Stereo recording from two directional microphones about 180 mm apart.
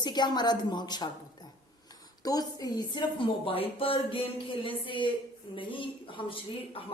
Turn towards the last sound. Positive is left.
turn(degrees=30)  # may be behind; listen again after turning